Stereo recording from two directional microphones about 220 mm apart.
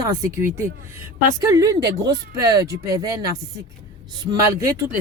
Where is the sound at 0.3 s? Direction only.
15° right (ahead or behind).